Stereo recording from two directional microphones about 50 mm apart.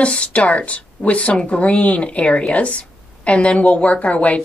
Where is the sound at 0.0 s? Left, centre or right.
Left.